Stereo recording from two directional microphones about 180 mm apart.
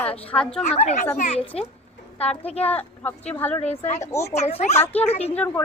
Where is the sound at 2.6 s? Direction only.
10° left (ahead or behind).